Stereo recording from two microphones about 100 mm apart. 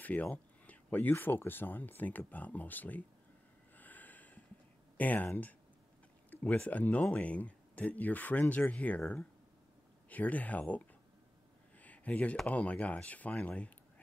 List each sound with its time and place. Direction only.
0.0 s speech: 15° left (ahead or behind)
3.7 s snort: 15° left (ahead or behind)
4.9 s speech: 15° left (ahead or behind)
11.8 s a sound: 15° left (ahead or behind)
12.4 s speech: 15° left (ahead or behind)